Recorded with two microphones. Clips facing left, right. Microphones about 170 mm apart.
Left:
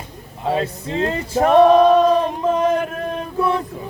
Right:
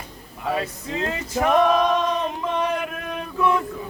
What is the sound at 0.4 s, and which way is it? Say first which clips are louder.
Male singing: left 5 dB; 30° left (ahead or behind).